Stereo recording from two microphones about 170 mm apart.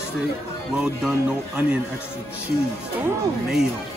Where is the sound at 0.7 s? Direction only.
5° right (ahead or behind).